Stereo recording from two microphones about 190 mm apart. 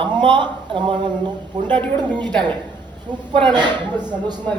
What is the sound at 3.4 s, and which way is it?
Speech, 25° right (ahead or behind).